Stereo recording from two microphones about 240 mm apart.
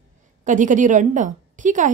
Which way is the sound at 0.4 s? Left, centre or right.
Right.